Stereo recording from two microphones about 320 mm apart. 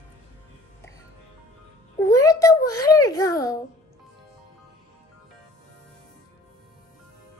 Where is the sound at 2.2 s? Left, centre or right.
Centre.